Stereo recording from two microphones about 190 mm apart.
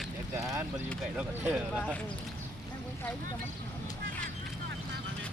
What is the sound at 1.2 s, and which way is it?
Speech, 5° right (ahead or behind).